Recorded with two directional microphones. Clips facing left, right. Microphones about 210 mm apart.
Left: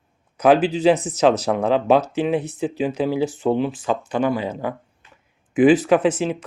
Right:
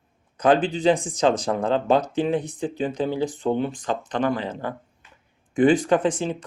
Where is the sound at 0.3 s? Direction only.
10° left (ahead or behind).